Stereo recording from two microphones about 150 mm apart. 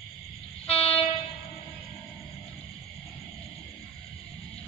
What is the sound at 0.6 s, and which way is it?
Train, 40° left (ahead or behind).